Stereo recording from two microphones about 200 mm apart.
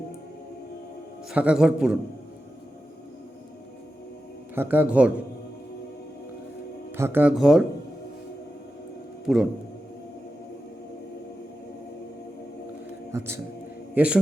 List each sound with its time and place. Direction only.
1.3 s a man's voice: 5° right (ahead or behind)
4.5 s speech: 10° right (ahead or behind)
6.9 s speech: 10° right (ahead or behind)
9.2 s a man's voice: centre (ahead or behind)
13.1 s a man's voice: 15° right (ahead or behind)